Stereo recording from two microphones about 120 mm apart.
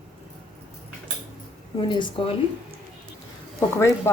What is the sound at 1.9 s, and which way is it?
Speech, 40° left (ahead or behind).